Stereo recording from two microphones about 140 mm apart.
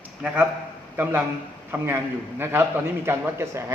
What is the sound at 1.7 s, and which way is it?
A man's voice, 15° right (ahead or behind).